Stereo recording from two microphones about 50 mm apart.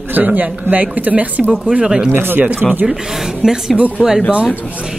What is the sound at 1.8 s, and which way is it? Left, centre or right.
Speech, centre.